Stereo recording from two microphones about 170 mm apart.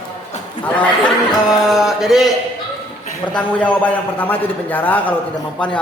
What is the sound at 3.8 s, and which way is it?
A man's voice, 10° left (ahead or behind).